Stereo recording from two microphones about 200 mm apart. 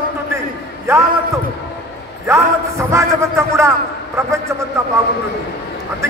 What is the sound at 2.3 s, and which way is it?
A man's voice, 15° right (ahead or behind).